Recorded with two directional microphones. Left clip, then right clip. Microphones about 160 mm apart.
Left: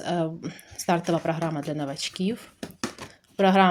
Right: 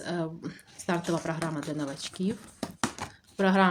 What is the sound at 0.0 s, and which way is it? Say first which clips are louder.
Speech: left 6 dB; 25° left (ahead or behind).